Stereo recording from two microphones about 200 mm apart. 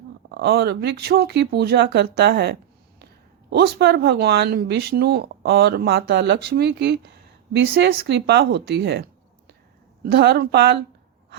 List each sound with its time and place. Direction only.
0.3 s speech: 55° right (ahead or behind)